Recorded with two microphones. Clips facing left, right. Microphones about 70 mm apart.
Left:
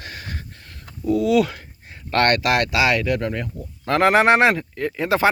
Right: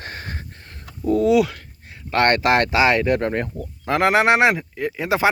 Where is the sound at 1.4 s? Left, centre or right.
Centre.